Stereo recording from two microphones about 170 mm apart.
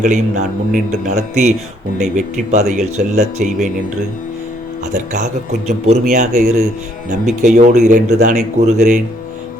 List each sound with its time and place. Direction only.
0.0 s speech: 50° right (ahead or behind)
4.9 s speech: 45° right (ahead or behind)